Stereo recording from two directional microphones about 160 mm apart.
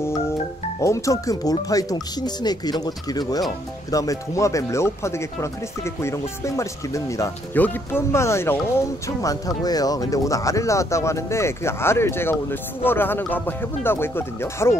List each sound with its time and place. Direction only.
0.7 s speech: 20° left (ahead or behind)